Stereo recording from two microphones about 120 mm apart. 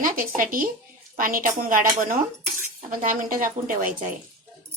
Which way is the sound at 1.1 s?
90° right.